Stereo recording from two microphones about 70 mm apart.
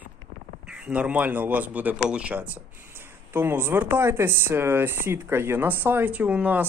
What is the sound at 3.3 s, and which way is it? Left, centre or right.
Speech, right.